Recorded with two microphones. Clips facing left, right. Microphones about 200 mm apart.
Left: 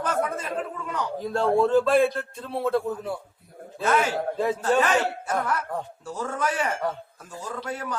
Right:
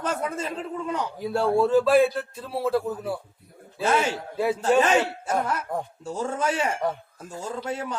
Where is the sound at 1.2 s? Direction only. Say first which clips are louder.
Even; 10° right (ahead or behind).